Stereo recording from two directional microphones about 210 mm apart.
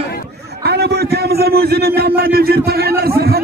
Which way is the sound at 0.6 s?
50° right (ahead or behind).